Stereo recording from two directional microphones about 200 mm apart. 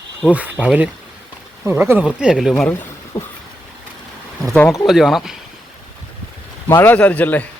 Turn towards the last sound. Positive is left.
turn(degrees=10)  # may be behind; listen again after turning